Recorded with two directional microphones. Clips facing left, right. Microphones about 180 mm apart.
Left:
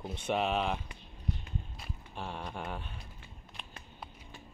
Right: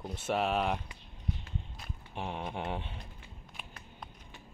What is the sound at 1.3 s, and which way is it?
Walk, centre (ahead or behind).